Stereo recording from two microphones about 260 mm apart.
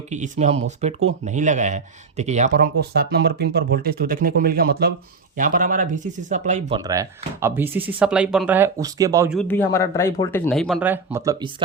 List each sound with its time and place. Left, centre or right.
0.1 s speech: right
6.7 s speech: centre
9.4 s speech: centre